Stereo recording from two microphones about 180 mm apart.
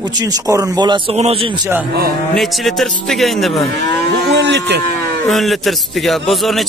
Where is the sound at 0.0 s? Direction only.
20° right (ahead or behind).